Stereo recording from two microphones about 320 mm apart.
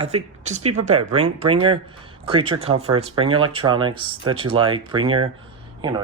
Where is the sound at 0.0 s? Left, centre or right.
Right.